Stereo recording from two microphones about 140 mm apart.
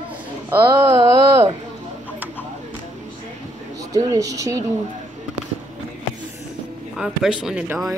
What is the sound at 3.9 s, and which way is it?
Speech, 25° right (ahead or behind).